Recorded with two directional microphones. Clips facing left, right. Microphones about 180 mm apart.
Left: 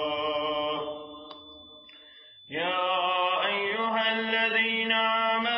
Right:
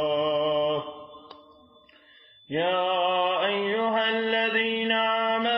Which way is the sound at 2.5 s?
40° right (ahead or behind).